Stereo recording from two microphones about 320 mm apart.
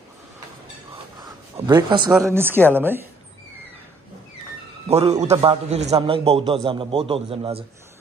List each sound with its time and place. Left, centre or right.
1.7 s a man's voice: centre
4.8 s a man's voice: centre